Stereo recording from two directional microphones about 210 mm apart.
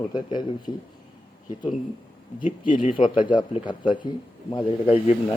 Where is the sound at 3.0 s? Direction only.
25° left (ahead or behind).